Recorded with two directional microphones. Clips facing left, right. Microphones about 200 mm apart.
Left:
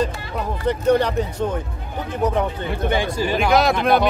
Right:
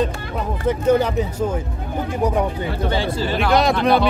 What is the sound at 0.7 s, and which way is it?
Speech, 5° right (ahead or behind).